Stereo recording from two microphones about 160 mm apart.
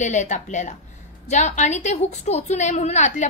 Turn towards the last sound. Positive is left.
turn(degrees=45)  # may be behind; listen again after turning